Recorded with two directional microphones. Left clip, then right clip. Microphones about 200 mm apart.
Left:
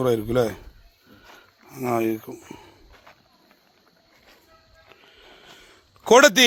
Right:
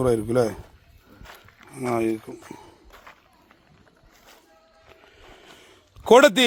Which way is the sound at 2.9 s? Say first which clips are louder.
Right 6 dB; 40° right (ahead or behind).